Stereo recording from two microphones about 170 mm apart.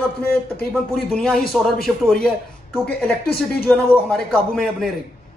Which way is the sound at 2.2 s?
5° left (ahead or behind).